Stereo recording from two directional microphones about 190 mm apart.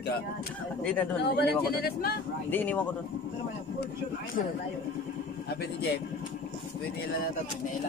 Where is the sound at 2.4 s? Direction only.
10° left (ahead or behind).